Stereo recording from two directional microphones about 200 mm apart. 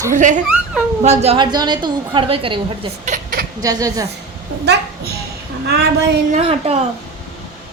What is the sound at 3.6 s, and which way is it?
Speech, 15° right (ahead or behind).